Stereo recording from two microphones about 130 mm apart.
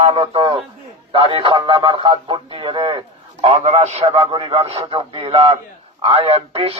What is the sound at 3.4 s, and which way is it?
A man's voice, 50° right (ahead or behind).